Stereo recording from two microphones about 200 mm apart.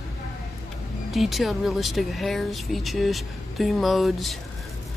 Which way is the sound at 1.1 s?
Centre (ahead or behind).